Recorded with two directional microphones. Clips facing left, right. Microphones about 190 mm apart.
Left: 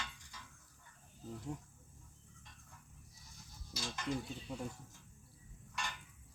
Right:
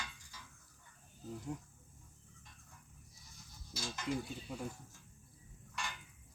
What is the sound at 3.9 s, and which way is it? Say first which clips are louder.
Stir: right 1 dB; 5° right (ahead or behind).